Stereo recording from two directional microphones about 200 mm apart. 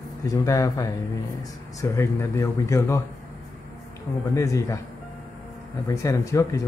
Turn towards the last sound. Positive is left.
turn(degrees=15)  # may be behind; listen again after turning